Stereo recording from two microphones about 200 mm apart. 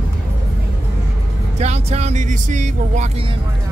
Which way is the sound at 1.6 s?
35° right (ahead or behind).